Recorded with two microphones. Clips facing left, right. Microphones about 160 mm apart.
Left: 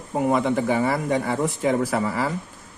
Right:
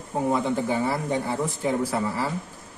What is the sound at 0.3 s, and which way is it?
A man's voice, 90° left.